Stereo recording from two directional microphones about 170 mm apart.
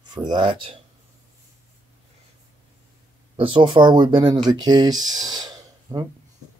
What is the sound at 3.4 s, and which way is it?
Speech, 30° right (ahead or behind).